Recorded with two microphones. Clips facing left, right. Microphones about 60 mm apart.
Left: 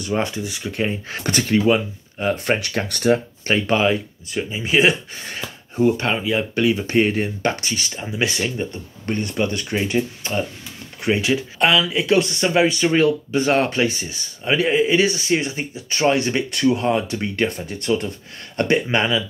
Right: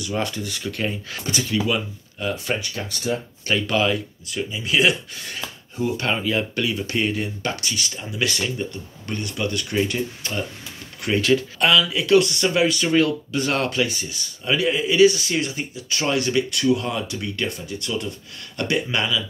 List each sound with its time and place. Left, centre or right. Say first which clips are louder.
0.0 s speech: left 3 dB; left
1.2 s speech: left 5 dB; left
1.7 s speech: left 6 dB; left
2.6 s speech: left 7 dB; left
3.4 s speech: left 3 dB; left
6.0 s speech: left 2 dB; centre
6.5 s speech: left 6 dB; left